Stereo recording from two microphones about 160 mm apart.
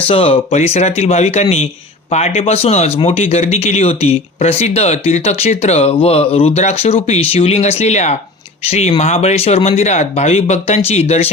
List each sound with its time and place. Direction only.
0.1 s speech: 35° left (ahead or behind)